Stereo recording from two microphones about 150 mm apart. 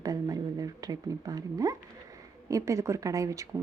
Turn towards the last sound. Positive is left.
turn(degrees=-20)  # may be behind; listen again after turning